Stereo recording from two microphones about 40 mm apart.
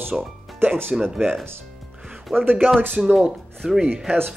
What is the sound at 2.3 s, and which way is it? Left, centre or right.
Speech, right.